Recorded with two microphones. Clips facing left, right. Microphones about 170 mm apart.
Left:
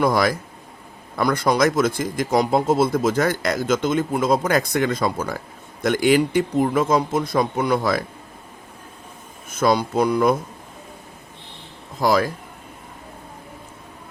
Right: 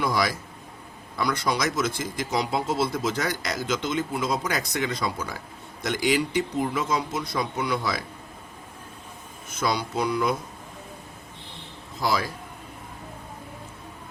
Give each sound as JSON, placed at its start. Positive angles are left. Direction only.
{"t": 0.0, "sound": "speech", "side_deg": 50}
{"t": 9.5, "sound": "speech", "side_deg": 50}
{"t": 11.9, "sound": "speech", "side_deg": 50}